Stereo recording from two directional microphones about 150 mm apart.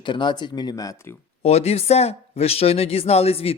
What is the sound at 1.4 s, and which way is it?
A man's voice, 45° left (ahead or behind).